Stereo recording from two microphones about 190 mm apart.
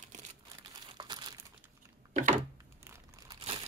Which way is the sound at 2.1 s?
45° right (ahead or behind).